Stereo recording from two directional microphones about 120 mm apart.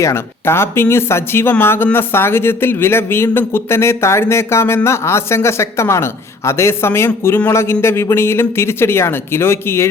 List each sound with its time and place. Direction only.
0.0 s speech: 20° left (ahead or behind)